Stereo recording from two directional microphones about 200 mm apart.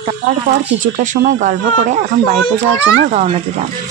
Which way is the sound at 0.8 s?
40° right (ahead or behind).